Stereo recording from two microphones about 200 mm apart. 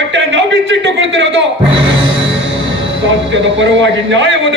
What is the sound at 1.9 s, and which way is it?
Music, 70° right (ahead or behind).